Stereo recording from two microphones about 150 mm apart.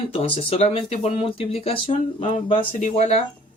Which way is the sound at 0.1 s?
40° left (ahead or behind).